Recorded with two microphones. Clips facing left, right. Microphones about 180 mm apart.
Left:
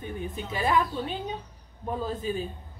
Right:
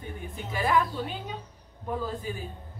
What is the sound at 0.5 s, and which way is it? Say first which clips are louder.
Speech: even; 20° left (ahead or behind).